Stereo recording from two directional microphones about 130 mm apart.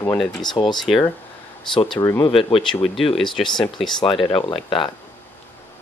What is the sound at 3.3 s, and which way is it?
Speech, 5° left (ahead or behind).